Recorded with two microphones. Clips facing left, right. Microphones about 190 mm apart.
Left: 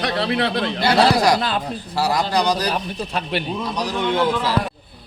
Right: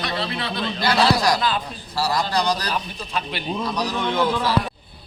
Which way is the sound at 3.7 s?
15° left (ahead or behind).